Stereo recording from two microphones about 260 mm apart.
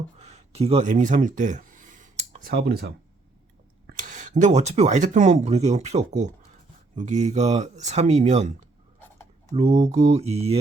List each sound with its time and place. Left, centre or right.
0.2 s a sound: right
3.8 s speech: right
9.0 s writing: centre
9.6 s speech: right